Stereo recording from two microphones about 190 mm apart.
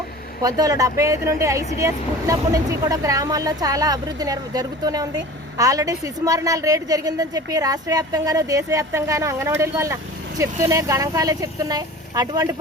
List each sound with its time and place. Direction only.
0.4 s speech: 20° right (ahead or behind)